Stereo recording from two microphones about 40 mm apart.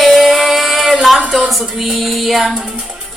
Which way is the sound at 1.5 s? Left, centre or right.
Centre.